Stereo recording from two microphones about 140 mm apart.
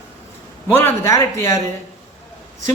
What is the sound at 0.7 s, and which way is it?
Speech, 15° left (ahead or behind).